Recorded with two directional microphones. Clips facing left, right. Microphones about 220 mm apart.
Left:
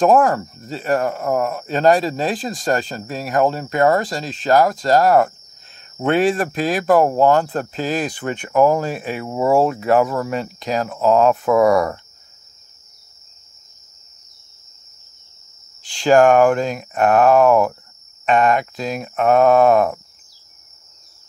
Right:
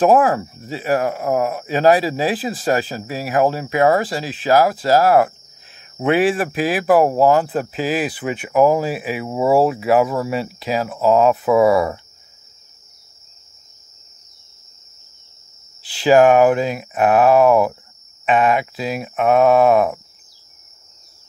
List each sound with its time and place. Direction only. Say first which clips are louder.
0.0 s speech: even; 5° right (ahead or behind)
15.8 s speech: right 1 dB; 5° right (ahead or behind)